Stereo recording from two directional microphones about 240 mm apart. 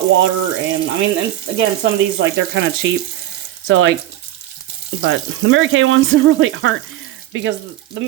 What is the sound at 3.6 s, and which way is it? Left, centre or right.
Speech, right.